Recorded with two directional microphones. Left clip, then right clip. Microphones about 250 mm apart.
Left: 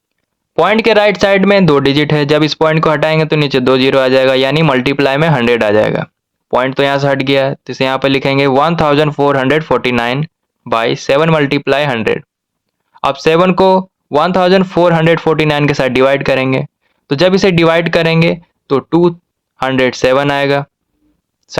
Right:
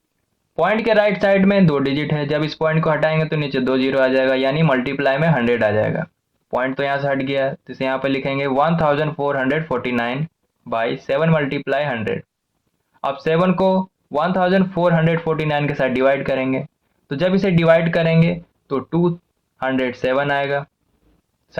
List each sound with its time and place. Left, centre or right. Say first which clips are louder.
0.8 s speech: left 6 dB; left